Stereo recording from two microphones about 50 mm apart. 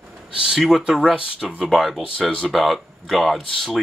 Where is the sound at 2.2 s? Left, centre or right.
Centre.